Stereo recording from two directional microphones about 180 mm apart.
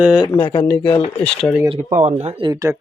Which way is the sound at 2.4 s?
15° right (ahead or behind).